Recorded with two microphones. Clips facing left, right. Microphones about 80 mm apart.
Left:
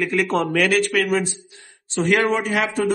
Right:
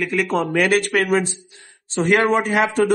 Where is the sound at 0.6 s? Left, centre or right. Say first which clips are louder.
Right 2 dB; right.